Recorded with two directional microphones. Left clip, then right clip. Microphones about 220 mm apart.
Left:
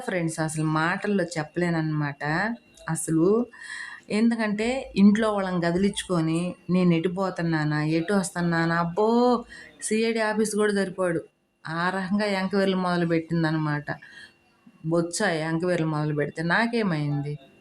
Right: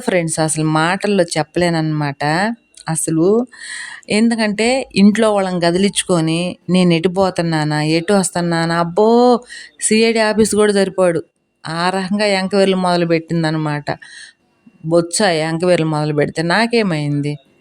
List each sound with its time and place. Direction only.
0.0 s speech: 40° right (ahead or behind)